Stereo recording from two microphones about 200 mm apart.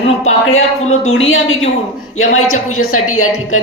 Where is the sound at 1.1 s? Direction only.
75° left (ahead or behind).